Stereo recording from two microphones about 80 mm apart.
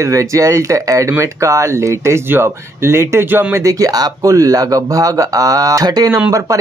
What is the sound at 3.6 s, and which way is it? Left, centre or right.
Speech, right.